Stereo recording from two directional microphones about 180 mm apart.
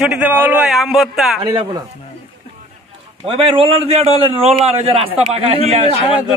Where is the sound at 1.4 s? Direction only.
25° right (ahead or behind).